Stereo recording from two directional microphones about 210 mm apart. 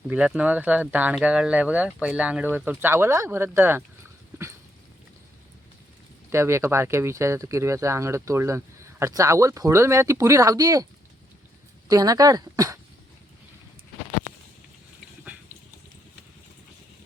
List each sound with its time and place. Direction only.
0.1 s speech: 5° right (ahead or behind)
6.3 s speech: 10° right (ahead or behind)
11.9 s speech: 15° right (ahead or behind)